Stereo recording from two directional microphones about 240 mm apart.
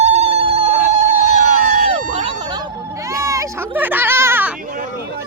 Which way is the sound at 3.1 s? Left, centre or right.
Centre.